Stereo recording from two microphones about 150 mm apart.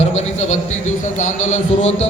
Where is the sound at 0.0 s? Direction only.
45° left (ahead or behind).